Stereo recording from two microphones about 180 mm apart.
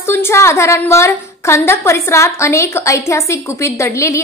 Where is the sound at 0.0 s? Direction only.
15° left (ahead or behind).